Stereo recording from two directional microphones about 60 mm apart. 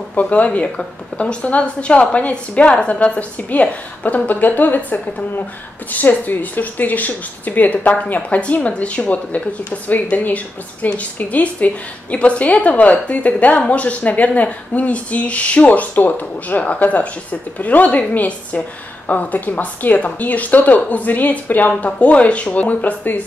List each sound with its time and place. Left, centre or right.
0.1 s speech: left